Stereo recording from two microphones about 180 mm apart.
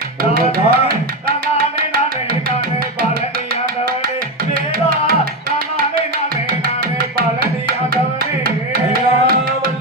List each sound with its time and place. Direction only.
0.2 s music: 55° right (ahead or behind)
4.5 s music: 55° right (ahead or behind)
8.2 s music: 55° right (ahead or behind)